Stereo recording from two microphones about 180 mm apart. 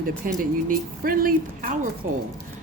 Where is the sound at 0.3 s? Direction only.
50° right (ahead or behind).